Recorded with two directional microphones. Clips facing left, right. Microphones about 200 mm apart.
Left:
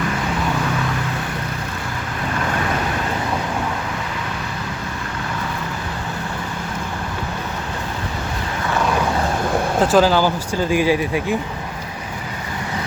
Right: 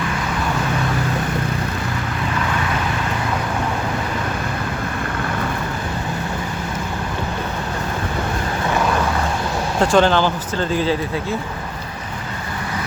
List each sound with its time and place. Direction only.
9.8 s speech: 5° left (ahead or behind)